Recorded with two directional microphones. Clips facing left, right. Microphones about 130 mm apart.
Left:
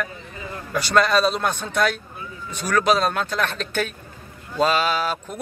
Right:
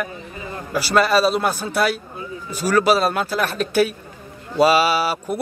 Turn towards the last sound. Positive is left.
turn(degrees=-10)  # may be behind; listen again after turning